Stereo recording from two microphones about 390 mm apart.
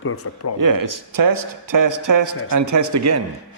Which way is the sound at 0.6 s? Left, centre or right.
Right.